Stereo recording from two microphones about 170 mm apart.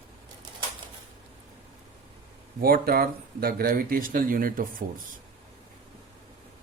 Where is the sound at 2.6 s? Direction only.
60° right (ahead or behind).